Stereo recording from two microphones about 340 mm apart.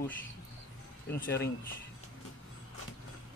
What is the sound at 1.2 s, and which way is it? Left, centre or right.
Speech, left.